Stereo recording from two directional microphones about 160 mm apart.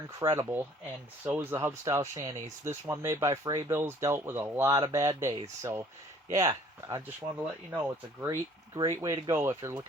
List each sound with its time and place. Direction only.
0.2 s speech: 20° right (ahead or behind)
6.3 s speech: 20° right (ahead or behind)
8.7 s speech: 25° right (ahead or behind)